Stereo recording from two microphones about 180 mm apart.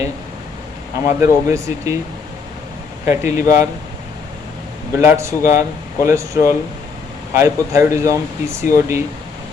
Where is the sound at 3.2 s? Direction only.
40° left (ahead or behind).